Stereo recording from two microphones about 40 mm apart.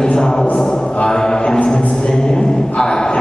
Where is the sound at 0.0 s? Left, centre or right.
Centre.